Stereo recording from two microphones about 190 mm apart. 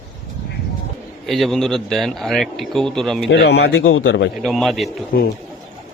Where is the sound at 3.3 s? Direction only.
60° left (ahead or behind).